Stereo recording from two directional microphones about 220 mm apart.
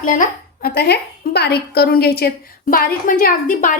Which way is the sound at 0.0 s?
35° left (ahead or behind).